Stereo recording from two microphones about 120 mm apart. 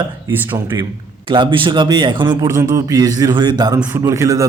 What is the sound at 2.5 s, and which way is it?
Speech, 25° right (ahead or behind).